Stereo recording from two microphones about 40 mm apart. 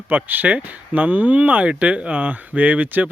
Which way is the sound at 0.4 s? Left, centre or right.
Right.